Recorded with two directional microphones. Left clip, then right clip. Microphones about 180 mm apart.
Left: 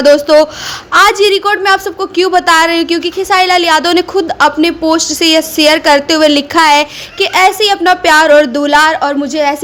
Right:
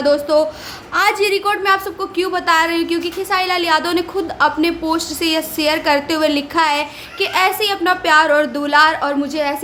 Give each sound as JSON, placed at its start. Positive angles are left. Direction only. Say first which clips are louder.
{"t": 0.0, "sound": "a woman's voice", "louder": "left 8 dB", "side_deg": 40}